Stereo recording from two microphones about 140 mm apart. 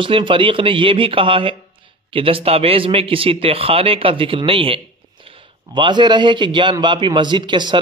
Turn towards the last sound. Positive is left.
turn(degrees=-35)  # may be behind; listen again after turning